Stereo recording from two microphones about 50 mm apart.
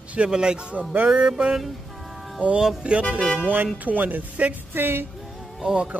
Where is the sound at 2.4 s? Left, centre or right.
Right.